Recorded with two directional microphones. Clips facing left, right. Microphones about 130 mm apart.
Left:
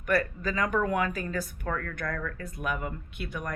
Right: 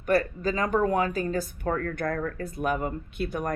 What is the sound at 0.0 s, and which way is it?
Speech, 30° right (ahead or behind).